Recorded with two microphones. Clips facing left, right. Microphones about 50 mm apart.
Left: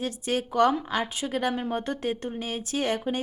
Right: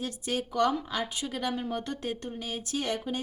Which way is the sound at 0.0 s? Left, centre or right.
Left.